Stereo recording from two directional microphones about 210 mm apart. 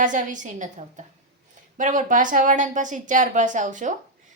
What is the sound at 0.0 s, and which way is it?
A woman's voice, 40° right (ahead or behind).